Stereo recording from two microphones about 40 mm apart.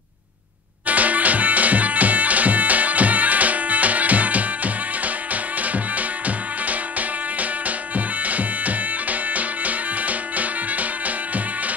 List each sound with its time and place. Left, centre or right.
0.8 s music: right